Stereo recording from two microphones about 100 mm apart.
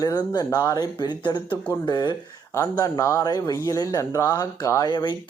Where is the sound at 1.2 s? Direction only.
50° left (ahead or behind).